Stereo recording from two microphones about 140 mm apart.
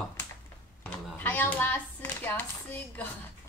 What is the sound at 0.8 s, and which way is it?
Clapping, 15° left (ahead or behind).